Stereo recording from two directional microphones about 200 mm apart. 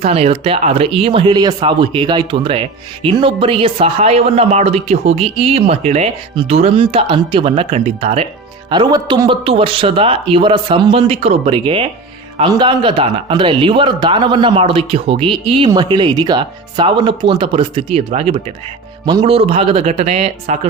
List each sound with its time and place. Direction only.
0.0 s speech: 30° right (ahead or behind)